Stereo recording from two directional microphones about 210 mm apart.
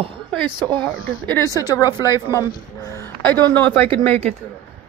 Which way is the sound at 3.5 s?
10° left (ahead or behind).